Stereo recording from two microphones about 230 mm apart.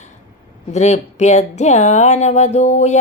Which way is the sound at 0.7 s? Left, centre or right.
Left.